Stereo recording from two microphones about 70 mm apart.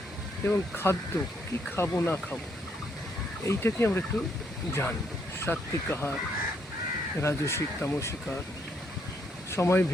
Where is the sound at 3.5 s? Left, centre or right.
Left.